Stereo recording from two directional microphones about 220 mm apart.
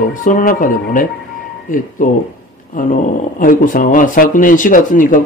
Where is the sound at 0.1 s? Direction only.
35° left (ahead or behind).